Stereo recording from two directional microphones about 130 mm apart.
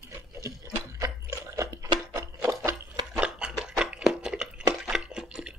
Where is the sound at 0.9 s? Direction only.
25° right (ahead or behind).